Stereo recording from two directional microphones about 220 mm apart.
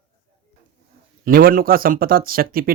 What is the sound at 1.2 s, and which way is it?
Speech, 40° right (ahead or behind).